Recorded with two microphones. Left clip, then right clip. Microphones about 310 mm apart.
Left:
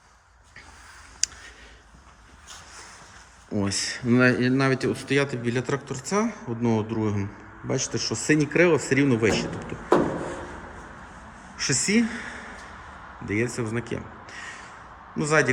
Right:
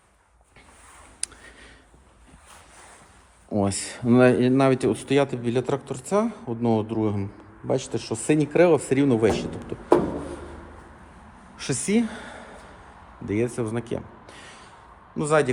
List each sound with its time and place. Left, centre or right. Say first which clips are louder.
3.5 s speech: right 1 dB; centre
11.6 s speech: left 2 dB; centre
15.2 s speech: right 1 dB; centre